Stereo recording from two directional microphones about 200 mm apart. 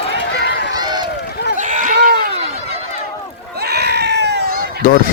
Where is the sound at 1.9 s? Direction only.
55° right (ahead or behind).